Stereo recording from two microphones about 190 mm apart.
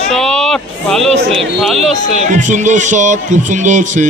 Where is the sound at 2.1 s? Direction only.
40° right (ahead or behind).